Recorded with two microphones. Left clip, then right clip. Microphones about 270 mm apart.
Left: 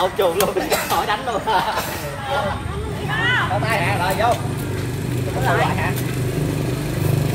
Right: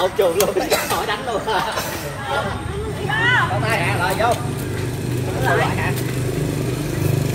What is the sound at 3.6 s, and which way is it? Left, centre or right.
Speech, left.